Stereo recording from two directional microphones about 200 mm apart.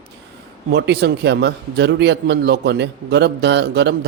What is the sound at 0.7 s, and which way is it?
A man's voice, 60° right (ahead or behind).